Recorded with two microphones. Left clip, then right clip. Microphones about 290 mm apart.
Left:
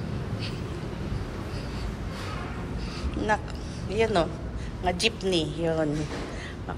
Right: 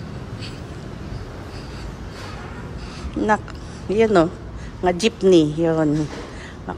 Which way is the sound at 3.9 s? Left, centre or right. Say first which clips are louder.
Right 8 dB; centre.